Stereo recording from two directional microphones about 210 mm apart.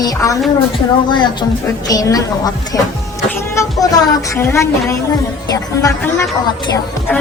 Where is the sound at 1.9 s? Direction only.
15° left (ahead or behind).